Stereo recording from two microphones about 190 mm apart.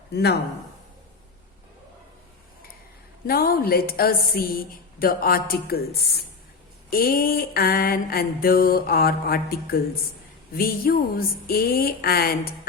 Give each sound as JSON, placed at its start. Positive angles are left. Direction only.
{"t": 0.1, "sound": "speech", "side_deg": 60}
{"t": 3.2, "sound": "mantra", "side_deg": 50}